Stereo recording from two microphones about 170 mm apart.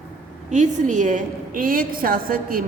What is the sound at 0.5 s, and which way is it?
A woman's voice, 45° right (ahead or behind).